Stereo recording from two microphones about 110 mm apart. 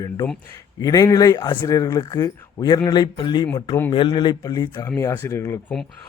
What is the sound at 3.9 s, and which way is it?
Speech, 50° left (ahead or behind).